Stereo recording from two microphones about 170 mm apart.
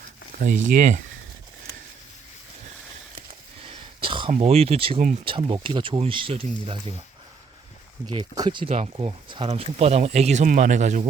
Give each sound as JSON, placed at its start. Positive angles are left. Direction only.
{"t": 0.3, "sound": "speech", "side_deg": -50}
{"t": 3.6, "sound": "a sound", "side_deg": -35}
{"t": 4.3, "sound": "speech", "side_deg": -35}
{"t": 8.0, "sound": "speech", "side_deg": -25}